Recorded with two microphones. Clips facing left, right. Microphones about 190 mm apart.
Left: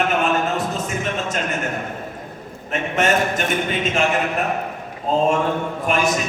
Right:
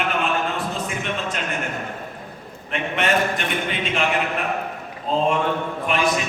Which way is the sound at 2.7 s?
45° left (ahead or behind).